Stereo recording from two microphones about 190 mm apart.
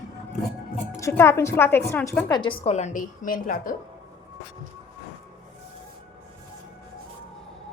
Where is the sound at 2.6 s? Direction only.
35° left (ahead or behind).